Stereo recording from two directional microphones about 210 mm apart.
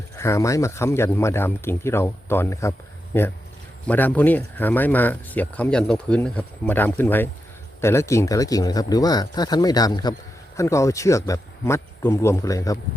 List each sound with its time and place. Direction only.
0.2 s speech: 15° left (ahead or behind)
3.8 s speech: 5° left (ahead or behind)